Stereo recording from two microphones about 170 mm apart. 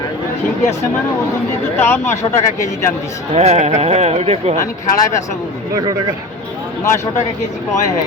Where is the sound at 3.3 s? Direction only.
40° right (ahead or behind).